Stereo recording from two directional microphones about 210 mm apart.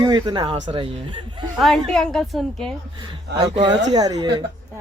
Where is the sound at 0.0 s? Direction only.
20° right (ahead or behind).